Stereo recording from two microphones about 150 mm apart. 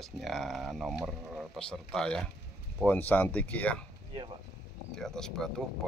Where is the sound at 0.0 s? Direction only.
Centre (ahead or behind).